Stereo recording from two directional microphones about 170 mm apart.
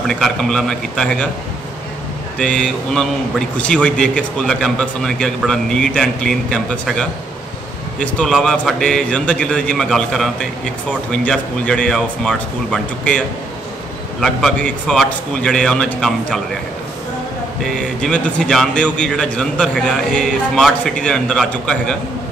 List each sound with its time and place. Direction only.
0.1 s a man's voice: centre (ahead or behind)
2.3 s a man's voice: 5° left (ahead or behind)
14.2 s a man's voice: centre (ahead or behind)
17.6 s a man's voice: 5° left (ahead or behind)